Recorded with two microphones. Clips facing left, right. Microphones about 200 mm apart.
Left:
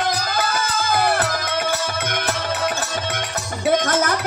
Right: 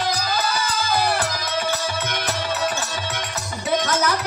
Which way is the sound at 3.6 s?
50° left (ahead or behind).